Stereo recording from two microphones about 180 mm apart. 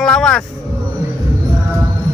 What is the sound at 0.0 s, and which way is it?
Vehicle, 5° left (ahead or behind).